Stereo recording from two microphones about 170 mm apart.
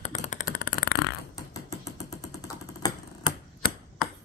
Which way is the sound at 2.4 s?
20° left (ahead or behind).